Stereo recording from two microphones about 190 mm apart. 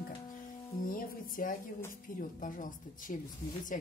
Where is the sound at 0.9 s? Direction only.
45° left (ahead or behind).